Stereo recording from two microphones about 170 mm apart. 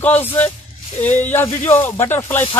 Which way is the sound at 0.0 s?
10° left (ahead or behind).